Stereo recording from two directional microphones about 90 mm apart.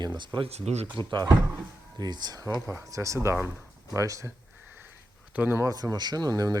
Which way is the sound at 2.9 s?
35° right (ahead or behind).